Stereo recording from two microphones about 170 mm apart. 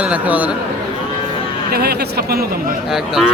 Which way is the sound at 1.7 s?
70° right (ahead or behind).